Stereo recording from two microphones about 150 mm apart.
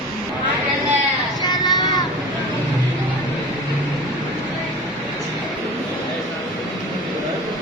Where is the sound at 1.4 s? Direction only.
25° left (ahead or behind).